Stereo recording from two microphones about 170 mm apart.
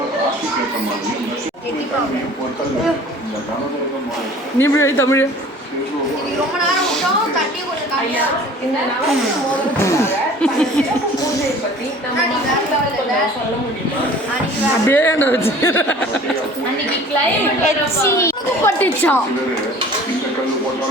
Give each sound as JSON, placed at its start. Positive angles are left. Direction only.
{"t": 4.6, "sound": "a woman's voice", "side_deg": 15}
{"t": 9.6, "sound": "a woman's voice", "side_deg": 15}
{"t": 10.4, "sound": "chuckle", "side_deg": 5}
{"t": 14.8, "sound": "a woman's voice", "side_deg": 10}
{"t": 18.0, "sound": "a woman's voice", "side_deg": 15}